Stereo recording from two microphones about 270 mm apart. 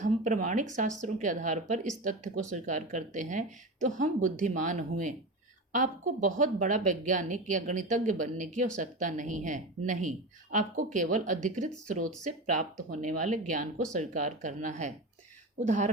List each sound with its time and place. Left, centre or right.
0.0 s speech: right